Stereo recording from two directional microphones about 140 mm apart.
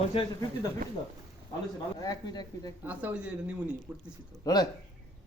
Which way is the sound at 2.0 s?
30° left (ahead or behind).